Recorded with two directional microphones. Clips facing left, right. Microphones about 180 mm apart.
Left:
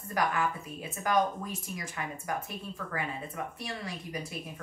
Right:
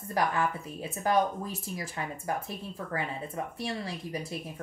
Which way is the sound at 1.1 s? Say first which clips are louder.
Right 1 dB; 30° right (ahead or behind).